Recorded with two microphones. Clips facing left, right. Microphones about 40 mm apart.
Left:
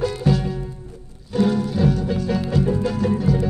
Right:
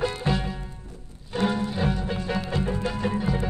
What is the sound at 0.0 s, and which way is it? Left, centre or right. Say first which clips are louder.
Music: left 5 dB; right.